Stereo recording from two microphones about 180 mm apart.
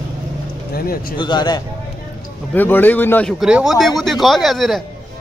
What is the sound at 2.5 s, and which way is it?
Speech, 10° left (ahead or behind).